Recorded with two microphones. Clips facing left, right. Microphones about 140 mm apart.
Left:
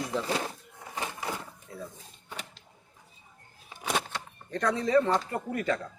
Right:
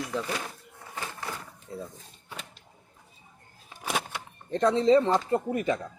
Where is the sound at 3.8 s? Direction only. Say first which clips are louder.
Even; 10° right (ahead or behind).